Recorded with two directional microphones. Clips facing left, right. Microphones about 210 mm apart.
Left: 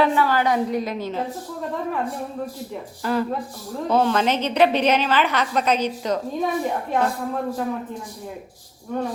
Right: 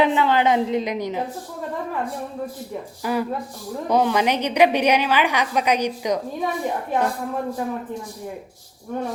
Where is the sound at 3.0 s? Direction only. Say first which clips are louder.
Left 1 dB; 10° right (ahead or behind).